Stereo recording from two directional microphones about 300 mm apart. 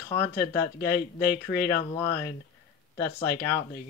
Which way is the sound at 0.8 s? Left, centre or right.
Left.